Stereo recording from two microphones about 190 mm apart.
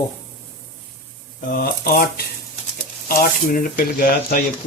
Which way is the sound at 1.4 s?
50° left (ahead or behind).